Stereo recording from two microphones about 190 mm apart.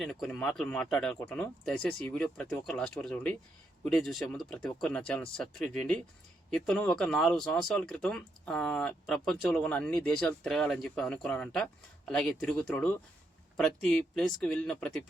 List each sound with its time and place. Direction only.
0.0 s speech: 5° left (ahead or behind)